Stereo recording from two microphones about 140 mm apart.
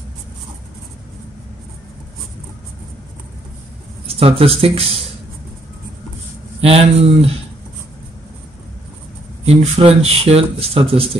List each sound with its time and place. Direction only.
4.1 s speech: 45° right (ahead or behind)
6.6 s speech: 45° right (ahead or behind)
9.5 s speech: 45° right (ahead or behind)